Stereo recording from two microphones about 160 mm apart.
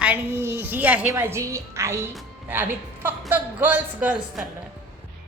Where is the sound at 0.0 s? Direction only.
10° right (ahead or behind).